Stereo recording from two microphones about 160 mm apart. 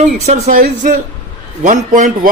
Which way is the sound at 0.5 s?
60° right (ahead or behind).